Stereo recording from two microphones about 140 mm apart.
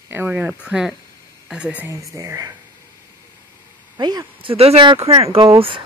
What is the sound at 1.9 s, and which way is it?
Speech, 20° right (ahead or behind).